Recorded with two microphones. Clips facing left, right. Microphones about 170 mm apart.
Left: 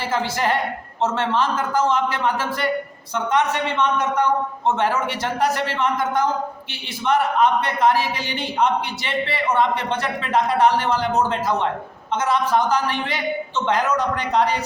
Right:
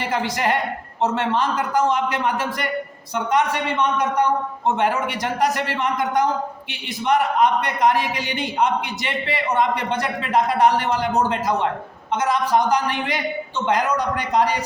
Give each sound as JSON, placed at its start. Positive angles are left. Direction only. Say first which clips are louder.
{"t": 0.0, "sound": "a woman's voice", "louder": "even", "side_deg": -15}
{"t": 7.3, "sound": "a man's voice", "louder": "even", "side_deg": -15}